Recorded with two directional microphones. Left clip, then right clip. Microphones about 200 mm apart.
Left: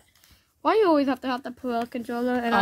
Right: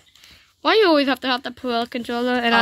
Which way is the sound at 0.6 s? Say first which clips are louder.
Right 5 dB; centre (ahead or behind).